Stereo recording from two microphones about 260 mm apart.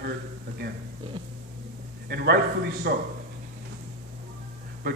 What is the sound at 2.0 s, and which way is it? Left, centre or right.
Speech, right.